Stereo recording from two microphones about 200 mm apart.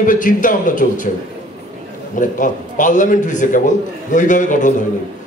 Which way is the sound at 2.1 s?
40° left (ahead or behind).